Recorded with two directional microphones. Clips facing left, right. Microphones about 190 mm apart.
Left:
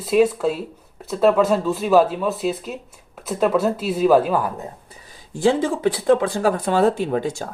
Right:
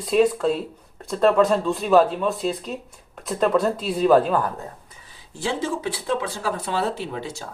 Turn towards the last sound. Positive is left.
turn(degrees=50)  # may be behind; listen again after turning